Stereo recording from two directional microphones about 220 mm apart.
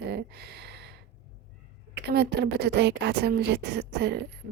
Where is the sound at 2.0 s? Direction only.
50° right (ahead or behind).